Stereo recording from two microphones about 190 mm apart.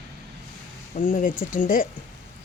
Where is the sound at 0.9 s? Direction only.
45° left (ahead or behind).